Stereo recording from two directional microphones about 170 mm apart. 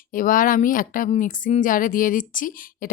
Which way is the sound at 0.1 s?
55° left (ahead or behind).